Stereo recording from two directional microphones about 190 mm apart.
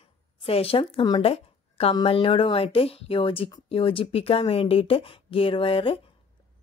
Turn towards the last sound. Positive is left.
turn(degrees=30)  # may be behind; listen again after turning